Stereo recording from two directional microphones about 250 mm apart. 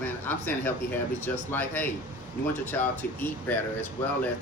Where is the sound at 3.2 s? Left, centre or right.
Centre.